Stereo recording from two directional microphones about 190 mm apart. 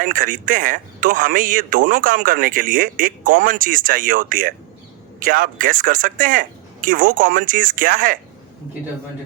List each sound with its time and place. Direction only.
0.0 s a man's voice: 45° right (ahead or behind)